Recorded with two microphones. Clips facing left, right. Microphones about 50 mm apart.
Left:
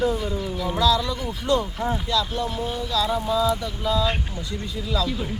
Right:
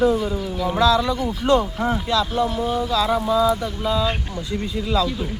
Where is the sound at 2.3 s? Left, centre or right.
Centre.